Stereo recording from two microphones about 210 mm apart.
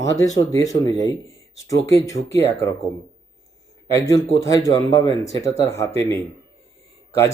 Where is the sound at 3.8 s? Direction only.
15° left (ahead or behind).